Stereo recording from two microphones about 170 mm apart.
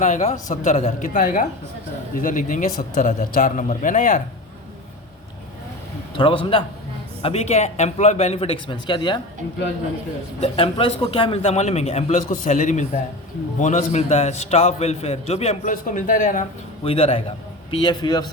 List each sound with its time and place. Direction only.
0.0 s a man's voice: 40° left (ahead or behind)
6.1 s a man's voice: 30° left (ahead or behind)
10.4 s a man's voice: 35° left (ahead or behind)
16.8 s a man's voice: 35° left (ahead or behind)